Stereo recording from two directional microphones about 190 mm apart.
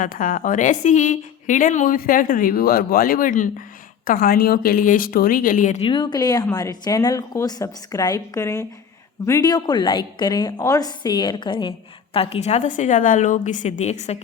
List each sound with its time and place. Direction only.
0.0 s a woman's voice: 45° left (ahead or behind)
5.9 s a woman's voice: 25° left (ahead or behind)